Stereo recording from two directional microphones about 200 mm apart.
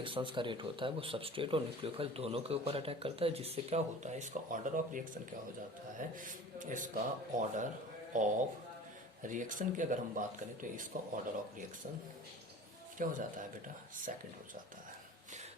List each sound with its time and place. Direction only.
0.0 s speech: 25° right (ahead or behind); by 11.6 s 40° right (ahead or behind)
13.0 s speech: 40° right (ahead or behind)